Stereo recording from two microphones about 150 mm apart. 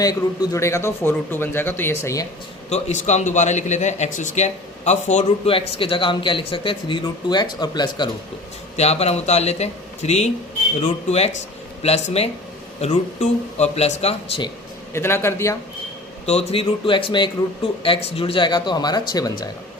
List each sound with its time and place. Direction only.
0.0 s speech: 20° left (ahead or behind)
2.6 s a man's voice: 45° left (ahead or behind); by 8.1 s 30° left (ahead or behind)
8.7 s speech: 45° left (ahead or behind)
14.9 s speech: 15° left (ahead or behind)
16.2 s a man's voice: 40° left (ahead or behind); by 19.5 s 25° left (ahead or behind)